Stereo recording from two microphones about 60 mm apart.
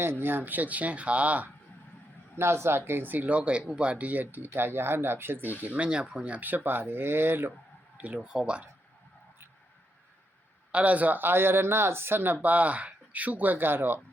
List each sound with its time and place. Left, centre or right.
0.0 s speech: right
2.3 s speech: right
5.7 s speech: centre; by 7.5 s right
7.9 s speech: centre
10.7 s speech: right